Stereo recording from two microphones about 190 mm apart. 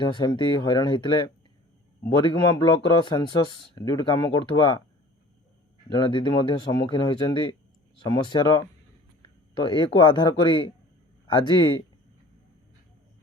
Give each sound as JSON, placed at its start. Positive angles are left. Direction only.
{"t": 0.0, "sound": "speech", "side_deg": 25}
{"t": 5.9, "sound": "speech", "side_deg": 25}